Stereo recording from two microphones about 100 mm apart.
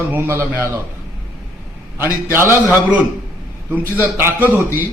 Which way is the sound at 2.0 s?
25° right (ahead or behind).